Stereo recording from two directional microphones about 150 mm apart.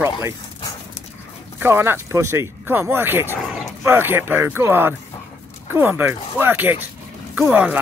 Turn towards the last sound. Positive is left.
turn(degrees=-10)  # may be behind; listen again after turning